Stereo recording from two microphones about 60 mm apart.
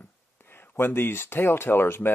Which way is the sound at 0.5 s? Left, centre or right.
Left.